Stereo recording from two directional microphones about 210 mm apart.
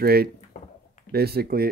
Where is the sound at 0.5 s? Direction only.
35° left (ahead or behind).